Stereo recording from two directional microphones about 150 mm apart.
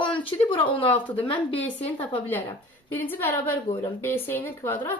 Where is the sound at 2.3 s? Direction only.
15° left (ahead or behind).